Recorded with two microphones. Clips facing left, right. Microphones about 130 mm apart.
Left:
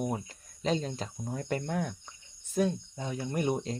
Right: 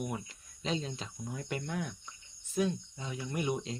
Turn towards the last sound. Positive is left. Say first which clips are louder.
# left 4 dB
turn(degrees=45)  # may be behind; listen again after turning